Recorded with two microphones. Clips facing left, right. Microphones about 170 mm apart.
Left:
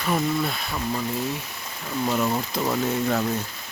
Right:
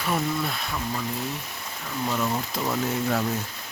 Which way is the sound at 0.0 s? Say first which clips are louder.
Left 3 dB; centre (ahead or behind).